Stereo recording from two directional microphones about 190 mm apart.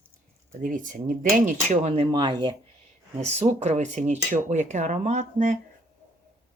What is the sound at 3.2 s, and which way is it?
Speech, 35° right (ahead or behind).